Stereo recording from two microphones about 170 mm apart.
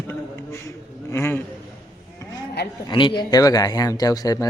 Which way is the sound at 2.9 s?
30° left (ahead or behind).